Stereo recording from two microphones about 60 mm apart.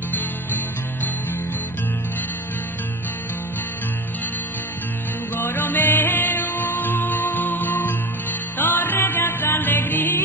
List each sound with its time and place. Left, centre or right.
5.4 s music: left